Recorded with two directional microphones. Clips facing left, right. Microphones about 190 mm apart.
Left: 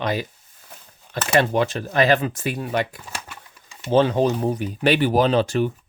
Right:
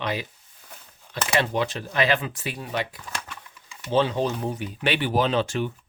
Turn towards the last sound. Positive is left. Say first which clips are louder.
# left 5 dB
turn(degrees=40)  # may be behind; listen again after turning